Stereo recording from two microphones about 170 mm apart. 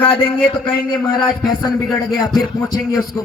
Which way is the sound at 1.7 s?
Centre (ahead or behind).